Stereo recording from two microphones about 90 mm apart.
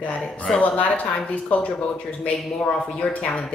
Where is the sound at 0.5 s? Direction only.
15° left (ahead or behind).